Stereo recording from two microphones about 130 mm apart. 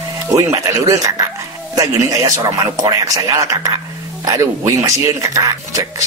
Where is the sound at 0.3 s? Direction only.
25° right (ahead or behind).